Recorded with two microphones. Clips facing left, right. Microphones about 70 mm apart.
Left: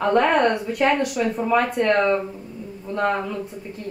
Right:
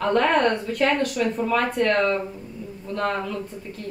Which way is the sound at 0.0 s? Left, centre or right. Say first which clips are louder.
Left 2 dB; centre.